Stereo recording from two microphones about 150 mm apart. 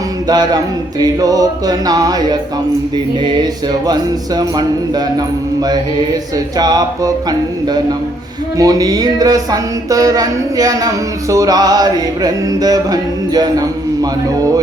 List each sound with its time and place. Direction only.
0.3 s music: 25° right (ahead or behind)